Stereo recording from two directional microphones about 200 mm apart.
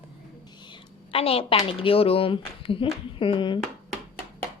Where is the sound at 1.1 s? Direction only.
30° left (ahead or behind).